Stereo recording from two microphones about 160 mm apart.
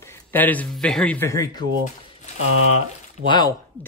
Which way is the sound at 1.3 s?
20° left (ahead or behind).